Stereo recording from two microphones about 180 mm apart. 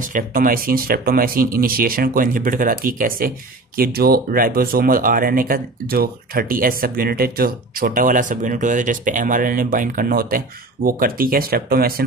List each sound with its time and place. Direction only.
0.0 s speech: 50° right (ahead or behind)